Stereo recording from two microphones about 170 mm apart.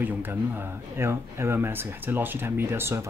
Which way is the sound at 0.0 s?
10° right (ahead or behind).